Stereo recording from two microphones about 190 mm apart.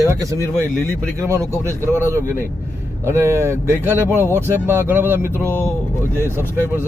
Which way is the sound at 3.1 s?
15° right (ahead or behind).